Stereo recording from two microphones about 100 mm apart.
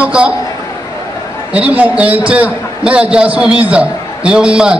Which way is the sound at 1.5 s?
15° right (ahead or behind).